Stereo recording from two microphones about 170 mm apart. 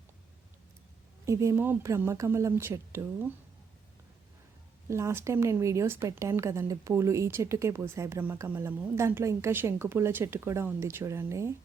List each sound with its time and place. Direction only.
1.2 s a woman's voice: 15° right (ahead or behind)
4.9 s a woman's voice: 15° right (ahead or behind)